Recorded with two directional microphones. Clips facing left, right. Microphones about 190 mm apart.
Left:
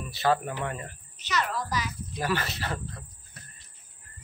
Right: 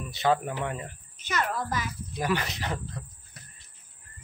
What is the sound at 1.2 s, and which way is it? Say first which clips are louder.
Speech: even; 50° right (ahead or behind).